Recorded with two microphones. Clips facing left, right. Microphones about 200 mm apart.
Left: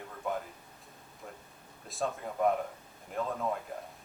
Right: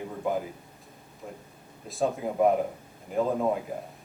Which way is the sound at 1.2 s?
15° right (ahead or behind).